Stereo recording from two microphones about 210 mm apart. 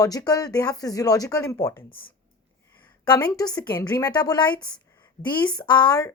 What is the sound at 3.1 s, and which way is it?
Speech, 5° left (ahead or behind).